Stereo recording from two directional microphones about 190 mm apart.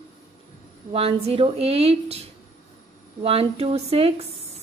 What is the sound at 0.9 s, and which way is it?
Speech, 30° right (ahead or behind).